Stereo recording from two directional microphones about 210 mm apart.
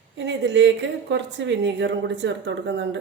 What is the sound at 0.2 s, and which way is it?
Speech, 60° right (ahead or behind).